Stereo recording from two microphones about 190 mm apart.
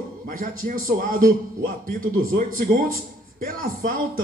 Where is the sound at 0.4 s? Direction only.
45° right (ahead or behind).